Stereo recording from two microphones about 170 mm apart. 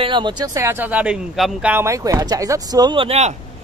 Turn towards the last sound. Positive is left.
turn(degrees=-40)  # may be behind; listen again after turning